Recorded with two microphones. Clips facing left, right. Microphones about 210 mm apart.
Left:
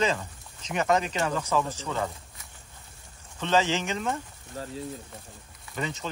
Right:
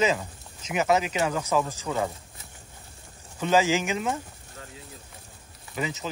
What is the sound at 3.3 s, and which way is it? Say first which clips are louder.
Speech: right 3 dB; 10° right (ahead or behind).